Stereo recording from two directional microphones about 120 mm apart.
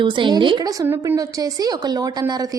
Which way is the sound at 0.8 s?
25° right (ahead or behind).